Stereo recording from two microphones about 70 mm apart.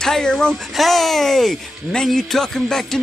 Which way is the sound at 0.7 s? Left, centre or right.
Centre.